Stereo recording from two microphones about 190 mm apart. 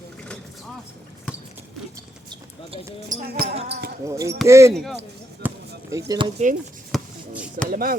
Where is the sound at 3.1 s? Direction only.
55° right (ahead or behind).